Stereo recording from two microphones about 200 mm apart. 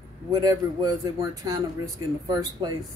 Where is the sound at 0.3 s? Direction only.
20° right (ahead or behind).